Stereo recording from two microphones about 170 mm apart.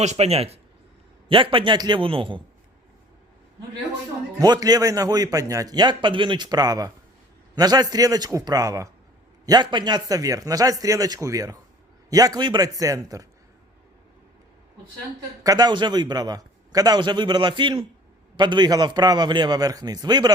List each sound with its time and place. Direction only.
0.0 s a man's voice: 40° right (ahead or behind)
4.4 s a man's voice: 25° right (ahead or behind)
15.4 s a man's voice: 25° right (ahead or behind)